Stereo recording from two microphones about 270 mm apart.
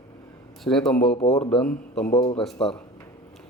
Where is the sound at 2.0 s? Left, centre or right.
Centre.